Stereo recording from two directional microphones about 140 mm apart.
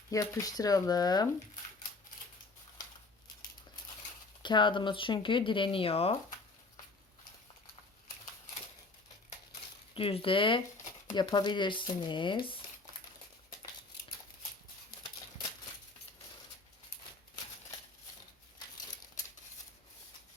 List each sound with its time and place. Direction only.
0.1 s speech: 25° left (ahead or behind)
4.4 s speech: 35° left (ahead or behind)
9.9 s speech: 40° left (ahead or behind)
14.8 s a sound: 30° left (ahead or behind)